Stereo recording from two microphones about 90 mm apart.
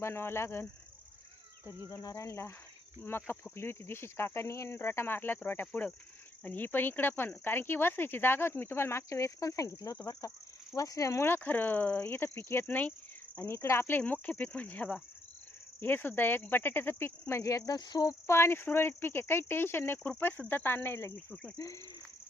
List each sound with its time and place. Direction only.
0.0 s speech: 30° left (ahead or behind)
1.9 s speech: 35° left (ahead or behind)
11.3 s speech: 20° left (ahead or behind); by 17.7 s 35° left (ahead or behind)
17.7 s cricket: 50° left (ahead or behind)
18.3 s speech: 30° left (ahead or behind)
21.6 s speech: 40° left (ahead or behind)